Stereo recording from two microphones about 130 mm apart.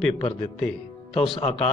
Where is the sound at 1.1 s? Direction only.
45° left (ahead or behind).